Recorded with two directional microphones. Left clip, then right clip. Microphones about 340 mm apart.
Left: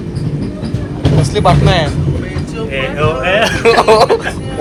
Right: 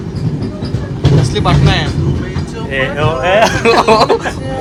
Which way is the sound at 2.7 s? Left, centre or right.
Right.